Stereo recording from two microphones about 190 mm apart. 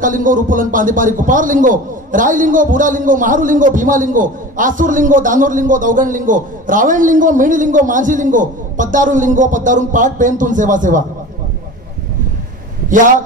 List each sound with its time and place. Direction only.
0.0 s a man's voice: 45° right (ahead or behind)